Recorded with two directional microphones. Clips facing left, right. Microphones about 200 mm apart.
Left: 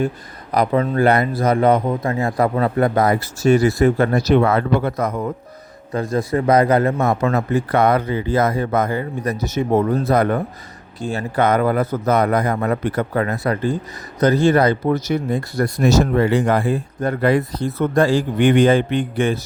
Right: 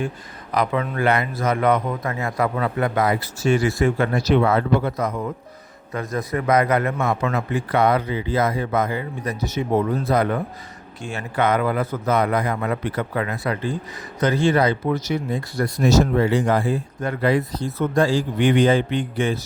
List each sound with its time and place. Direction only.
0.5 s a man's voice: 35° left (ahead or behind)
5.9 s a man's voice: 30° left (ahead or behind); by 10.4 s 45° left (ahead or behind)
11.0 s a man's voice: 35° left (ahead or behind); by 16.8 s 60° left (ahead or behind)
17.0 s a man's voice: 45° left (ahead or behind)